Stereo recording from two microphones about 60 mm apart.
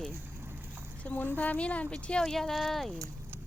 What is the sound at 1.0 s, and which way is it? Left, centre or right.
Speech, left.